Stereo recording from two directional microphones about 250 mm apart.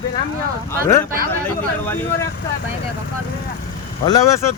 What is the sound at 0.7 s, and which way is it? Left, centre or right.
Speech, centre.